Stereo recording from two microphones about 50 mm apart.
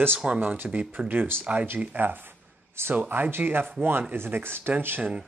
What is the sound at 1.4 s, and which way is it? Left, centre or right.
Speech, right.